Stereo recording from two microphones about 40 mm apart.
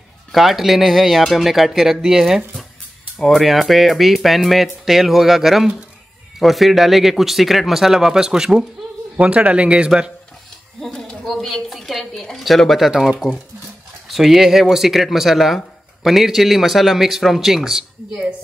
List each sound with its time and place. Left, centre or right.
0.3 s a man's voice: centre
3.2 s a man's voice: centre
9.2 s a man's voice: right
11.5 s a man's voice: centre